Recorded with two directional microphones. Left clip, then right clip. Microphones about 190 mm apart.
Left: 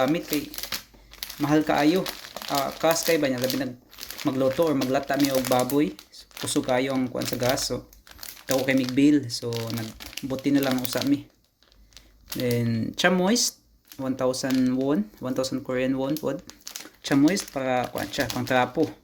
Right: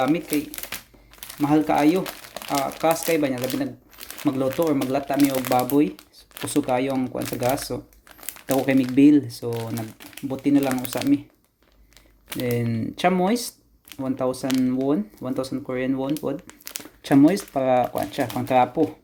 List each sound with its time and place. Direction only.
0.0 s speech: centre (ahead or behind)
2.3 s crumpling: 15° right (ahead or behind)
2.6 s speech: 5° right (ahead or behind)
5.7 s crumpling: 5° right (ahead or behind)
6.6 s speech: 5° right (ahead or behind)
9.7 s speech: centre (ahead or behind)
12.4 s speech: 5° right (ahead or behind)
16.6 s speech: 25° right (ahead or behind); by 18.9 s 10° right (ahead or behind)